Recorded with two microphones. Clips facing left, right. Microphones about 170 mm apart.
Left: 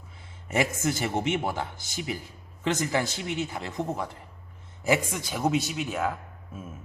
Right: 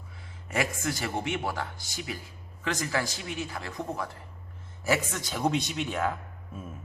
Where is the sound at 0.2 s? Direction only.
25° left (ahead or behind); by 6.7 s 5° left (ahead or behind).